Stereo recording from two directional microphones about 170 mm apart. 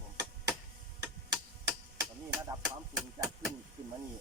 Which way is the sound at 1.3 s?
15° right (ahead or behind).